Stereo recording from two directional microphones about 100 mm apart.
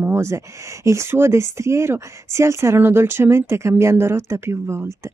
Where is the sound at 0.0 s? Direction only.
25° right (ahead or behind).